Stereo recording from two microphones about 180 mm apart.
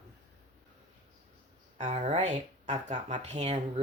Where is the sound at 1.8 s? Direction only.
40° right (ahead or behind).